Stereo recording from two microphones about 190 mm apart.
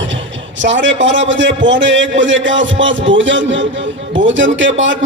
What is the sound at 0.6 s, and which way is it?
A man's voice, 75° right (ahead or behind).